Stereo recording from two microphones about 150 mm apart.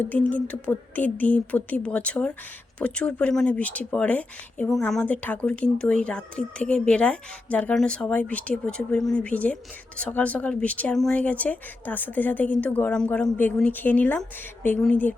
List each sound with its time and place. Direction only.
0.0 s speech: 10° left (ahead or behind)